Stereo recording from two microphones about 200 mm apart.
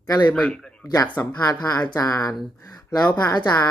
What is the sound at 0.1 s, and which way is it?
Speech, 20° left (ahead or behind).